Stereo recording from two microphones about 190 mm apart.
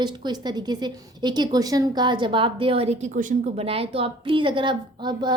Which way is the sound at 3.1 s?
45° right (ahead or behind).